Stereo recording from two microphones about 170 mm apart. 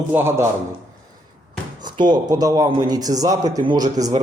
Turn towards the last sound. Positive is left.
turn(degrees=-20)  # may be behind; listen again after turning